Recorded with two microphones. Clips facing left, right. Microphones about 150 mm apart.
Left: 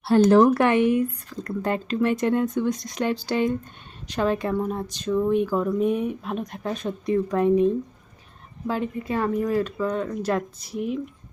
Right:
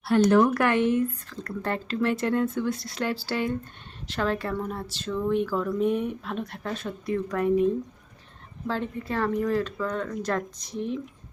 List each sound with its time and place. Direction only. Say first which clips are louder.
0.0 s speech: left 4 dB; 30° left (ahead or behind); by 11.0 s 5° left (ahead or behind)